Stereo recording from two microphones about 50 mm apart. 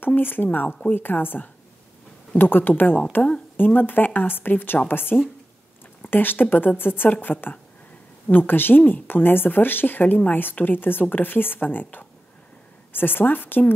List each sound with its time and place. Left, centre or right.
0.0 s speech: left
0.7 s speech: left
0.9 s a woman's voice: left